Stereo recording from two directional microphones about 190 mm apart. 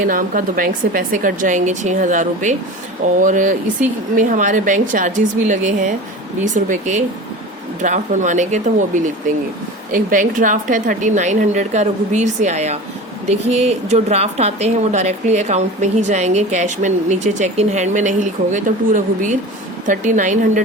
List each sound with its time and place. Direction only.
0.0 s a woman's voice: 45° right (ahead or behind)